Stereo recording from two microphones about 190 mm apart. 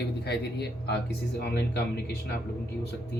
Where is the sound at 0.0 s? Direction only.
60° left (ahead or behind).